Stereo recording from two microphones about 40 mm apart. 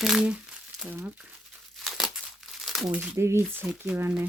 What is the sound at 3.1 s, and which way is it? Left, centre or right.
Speech, right.